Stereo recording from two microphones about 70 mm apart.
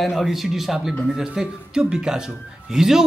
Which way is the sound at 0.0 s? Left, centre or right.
Centre.